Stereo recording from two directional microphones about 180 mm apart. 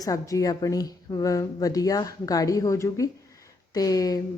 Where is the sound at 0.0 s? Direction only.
20° left (ahead or behind).